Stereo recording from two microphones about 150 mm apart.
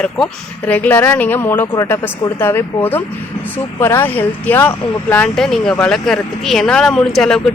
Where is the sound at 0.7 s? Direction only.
10° left (ahead or behind).